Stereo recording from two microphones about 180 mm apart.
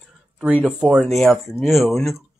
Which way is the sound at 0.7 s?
5° right (ahead or behind).